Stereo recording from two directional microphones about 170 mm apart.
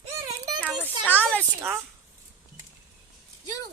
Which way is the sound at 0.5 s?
10° left (ahead or behind).